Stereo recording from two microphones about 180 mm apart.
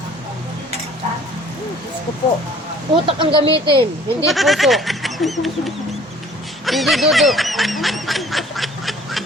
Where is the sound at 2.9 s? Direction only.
30° right (ahead or behind).